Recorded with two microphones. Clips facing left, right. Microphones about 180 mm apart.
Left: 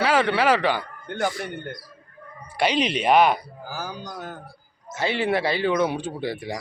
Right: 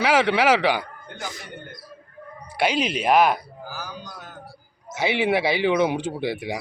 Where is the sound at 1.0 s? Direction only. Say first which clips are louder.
Left 10 dB; 60° left (ahead or behind).